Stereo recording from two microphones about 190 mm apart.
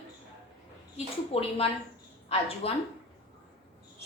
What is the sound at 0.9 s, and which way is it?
A woman's voice, 30° left (ahead or behind).